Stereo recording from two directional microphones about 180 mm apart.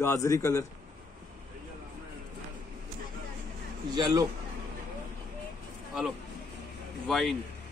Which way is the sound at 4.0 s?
25° right (ahead or behind).